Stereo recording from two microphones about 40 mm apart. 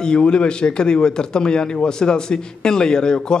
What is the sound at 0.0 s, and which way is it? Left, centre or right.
A man's voice, left.